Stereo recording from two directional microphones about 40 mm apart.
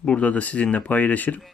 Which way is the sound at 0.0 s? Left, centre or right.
Left.